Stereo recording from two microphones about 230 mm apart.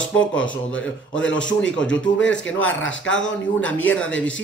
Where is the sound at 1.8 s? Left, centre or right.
Centre.